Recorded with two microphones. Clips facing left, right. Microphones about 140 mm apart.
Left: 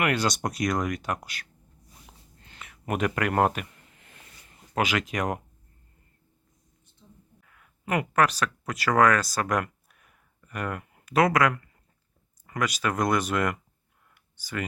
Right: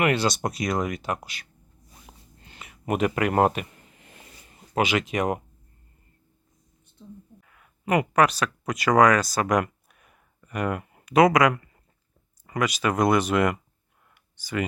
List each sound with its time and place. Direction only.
0.0 s speech: 5° right (ahead or behind)
2.0 s a sound: 20° right (ahead or behind)
2.6 s speech: 5° right (ahead or behind)
4.7 s speech: 10° right (ahead or behind)
7.4 s speech: 10° right (ahead or behind)
9.3 s a sound: 10° right (ahead or behind)
11.1 s speech: 15° right (ahead or behind)